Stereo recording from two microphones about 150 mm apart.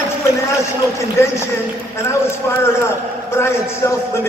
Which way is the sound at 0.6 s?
20° left (ahead or behind).